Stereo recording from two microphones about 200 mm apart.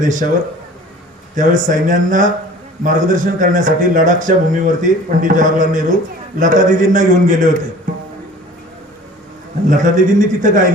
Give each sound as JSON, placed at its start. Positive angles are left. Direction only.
{"t": 0.0, "sound": "a man's voice", "side_deg": -40}
{"t": 1.4, "sound": "a man's voice", "side_deg": -40}
{"t": 9.6, "sound": "a man's voice", "side_deg": -40}